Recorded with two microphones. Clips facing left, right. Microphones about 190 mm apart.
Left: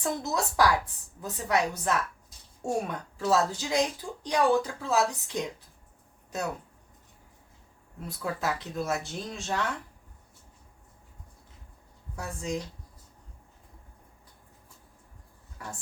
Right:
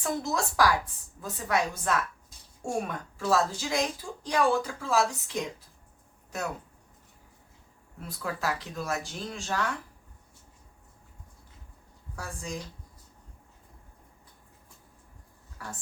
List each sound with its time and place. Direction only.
0.0 s a woman's voice: 20° left (ahead or behind)
8.0 s a woman's voice: 20° left (ahead or behind)
12.1 s a woman's voice: 20° left (ahead or behind)
15.6 s a woman's voice: 20° left (ahead or behind)